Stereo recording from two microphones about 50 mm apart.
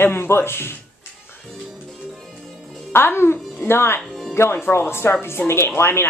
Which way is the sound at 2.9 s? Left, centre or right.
Left.